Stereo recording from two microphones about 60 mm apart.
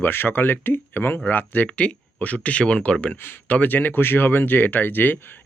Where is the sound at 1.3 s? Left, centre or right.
Left.